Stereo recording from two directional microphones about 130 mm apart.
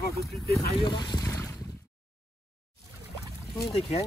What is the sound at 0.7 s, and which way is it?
Boat, 35° left (ahead or behind).